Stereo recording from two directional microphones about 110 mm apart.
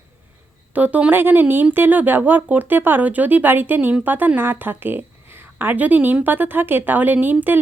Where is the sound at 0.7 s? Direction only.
15° right (ahead or behind).